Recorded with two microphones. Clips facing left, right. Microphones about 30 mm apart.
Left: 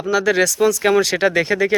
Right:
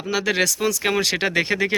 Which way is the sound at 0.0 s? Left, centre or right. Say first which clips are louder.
Left 5 dB; centre.